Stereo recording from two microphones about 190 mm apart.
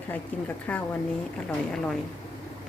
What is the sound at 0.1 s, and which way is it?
A woman's voice, 10° left (ahead or behind).